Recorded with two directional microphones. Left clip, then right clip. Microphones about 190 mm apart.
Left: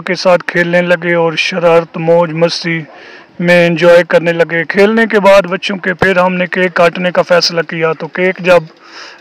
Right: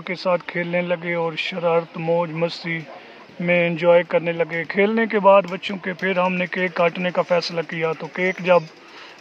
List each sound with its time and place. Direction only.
0.0 s speech: 45° left (ahead or behind)